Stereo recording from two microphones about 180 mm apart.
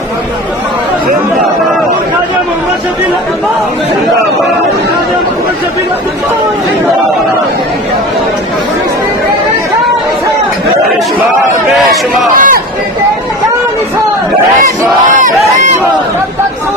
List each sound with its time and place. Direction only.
12.3 s speech: 50° right (ahead or behind)